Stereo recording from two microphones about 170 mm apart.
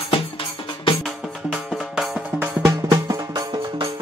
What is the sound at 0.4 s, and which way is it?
Music, 30° left (ahead or behind).